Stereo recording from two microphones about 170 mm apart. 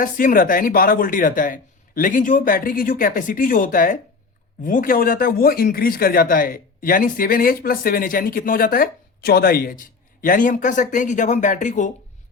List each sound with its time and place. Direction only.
0.0 s speech: 55° left (ahead or behind)